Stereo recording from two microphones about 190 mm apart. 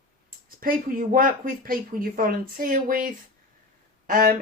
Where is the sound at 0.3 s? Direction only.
50° right (ahead or behind).